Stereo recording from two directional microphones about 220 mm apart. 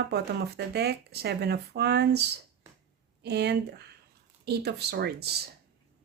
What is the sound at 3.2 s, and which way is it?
Speech, 50° right (ahead or behind).